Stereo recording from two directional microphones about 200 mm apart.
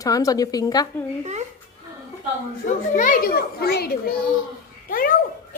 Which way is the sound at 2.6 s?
40° left (ahead or behind).